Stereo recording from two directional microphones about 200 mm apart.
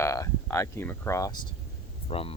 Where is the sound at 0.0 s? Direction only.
15° left (ahead or behind).